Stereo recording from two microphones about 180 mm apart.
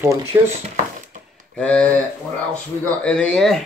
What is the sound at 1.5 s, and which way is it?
Speech, 5° left (ahead or behind).